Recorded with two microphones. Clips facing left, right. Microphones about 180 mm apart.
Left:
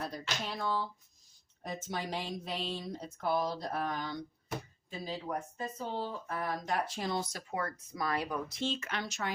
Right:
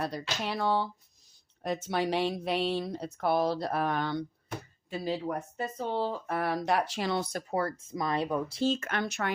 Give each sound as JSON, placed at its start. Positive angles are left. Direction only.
{"t": 0.0, "sound": "speech", "side_deg": -75}
{"t": 5.5, "sound": "speech", "side_deg": -70}
{"t": 7.5, "sound": "speech", "side_deg": -30}
{"t": 8.7, "sound": "speech", "side_deg": -50}